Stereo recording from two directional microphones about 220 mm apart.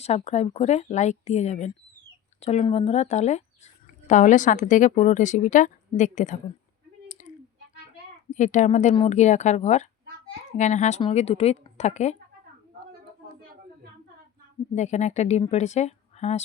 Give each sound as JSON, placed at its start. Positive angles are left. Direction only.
{"t": 0.0, "sound": "a woman's voice", "side_deg": 30}
{"t": 7.1, "sound": "a sound", "side_deg": 35}
{"t": 8.3, "sound": "a woman's voice", "side_deg": 35}
{"t": 14.8, "sound": "a woman's voice", "side_deg": 30}